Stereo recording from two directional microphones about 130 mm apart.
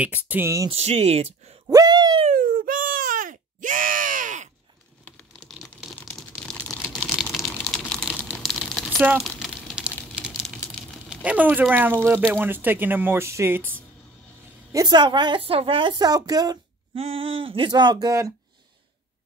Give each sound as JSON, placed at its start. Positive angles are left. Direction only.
{"t": 0.0, "sound": "speech", "side_deg": -15}
{"t": 0.7, "sound": "speech", "side_deg": -55}
{"t": 1.7, "sound": "a sound", "side_deg": -30}
{"t": 2.2, "sound": "a sound", "side_deg": -90}
{"t": 5.0, "sound": "typing", "side_deg": 10}
{"t": 6.0, "sound": "a sound", "side_deg": 0}
{"t": 11.1, "sound": "speech", "side_deg": -10}
{"t": 14.7, "sound": "a woman's voice", "side_deg": -30}
{"t": 16.9, "sound": "a woman's voice", "side_deg": -45}